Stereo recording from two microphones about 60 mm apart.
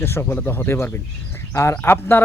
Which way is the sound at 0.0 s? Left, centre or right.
Left.